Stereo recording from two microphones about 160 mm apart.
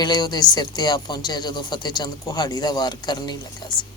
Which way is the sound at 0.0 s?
25° left (ahead or behind).